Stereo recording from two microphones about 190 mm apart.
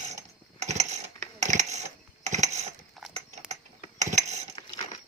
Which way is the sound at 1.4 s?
40° right (ahead or behind).